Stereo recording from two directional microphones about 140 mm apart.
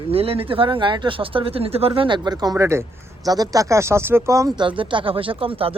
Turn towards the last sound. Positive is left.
turn(degrees=-40)  # may be behind; listen again after turning